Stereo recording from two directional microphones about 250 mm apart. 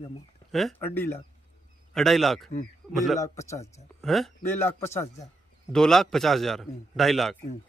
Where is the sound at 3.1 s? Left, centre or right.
Centre.